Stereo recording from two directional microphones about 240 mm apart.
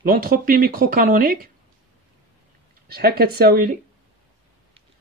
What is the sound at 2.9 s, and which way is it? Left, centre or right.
Speech, right.